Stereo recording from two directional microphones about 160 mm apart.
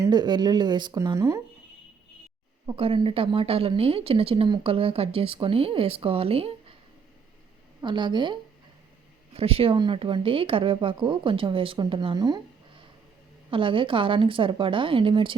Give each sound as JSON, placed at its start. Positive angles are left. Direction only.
{"t": 0.0, "sound": "speech", "side_deg": -25}
{"t": 2.6, "sound": "a woman's voice", "side_deg": -35}
{"t": 7.8, "sound": "a woman's voice", "side_deg": -30}
{"t": 13.5, "sound": "a woman's voice", "side_deg": -35}